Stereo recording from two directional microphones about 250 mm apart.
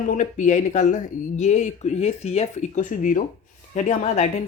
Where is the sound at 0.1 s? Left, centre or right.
Left.